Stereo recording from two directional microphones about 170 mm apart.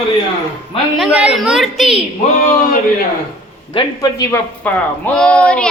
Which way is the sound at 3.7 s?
20° left (ahead or behind).